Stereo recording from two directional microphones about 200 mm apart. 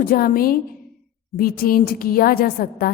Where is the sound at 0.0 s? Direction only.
45° left (ahead or behind).